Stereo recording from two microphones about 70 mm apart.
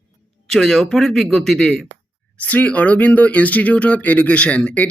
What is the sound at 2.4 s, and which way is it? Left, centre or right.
Speech, centre.